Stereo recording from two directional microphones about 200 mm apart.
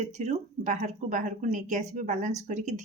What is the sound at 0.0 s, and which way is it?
Speech, 35° right (ahead or behind).